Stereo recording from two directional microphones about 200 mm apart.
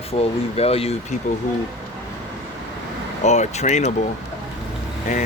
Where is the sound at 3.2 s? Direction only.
35° left (ahead or behind).